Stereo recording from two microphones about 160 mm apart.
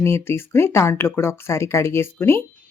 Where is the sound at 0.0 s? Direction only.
15° left (ahead or behind).